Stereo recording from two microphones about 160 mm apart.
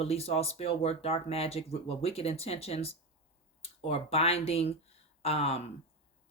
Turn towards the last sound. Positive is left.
turn(degrees=40)  # may be behind; listen again after turning